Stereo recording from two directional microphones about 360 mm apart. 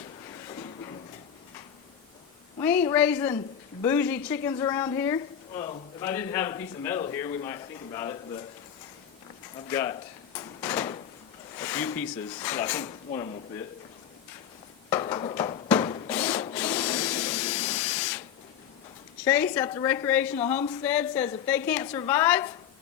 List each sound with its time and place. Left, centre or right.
2.6 s speech: centre
9.6 s speech: centre
10.3 s drawer open or close: centre
11.6 s speech: centre
13.1 s speech: centre
14.8 s wood: centre
19.2 s a woman's voice: centre